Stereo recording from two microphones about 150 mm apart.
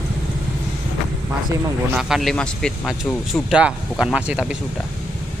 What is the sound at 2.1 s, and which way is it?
Speech, centre (ahead or behind).